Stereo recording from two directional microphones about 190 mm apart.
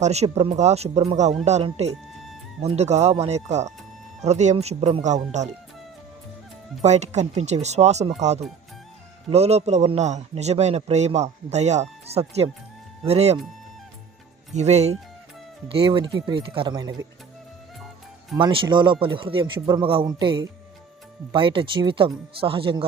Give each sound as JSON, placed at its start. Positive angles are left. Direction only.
{"t": 0.0, "sound": "a man's voice", "side_deg": -35}
{"t": 6.8, "sound": "a man's voice", "side_deg": -35}
{"t": 14.5, "sound": "a man's voice", "side_deg": -35}
{"t": 18.3, "sound": "speech", "side_deg": -25}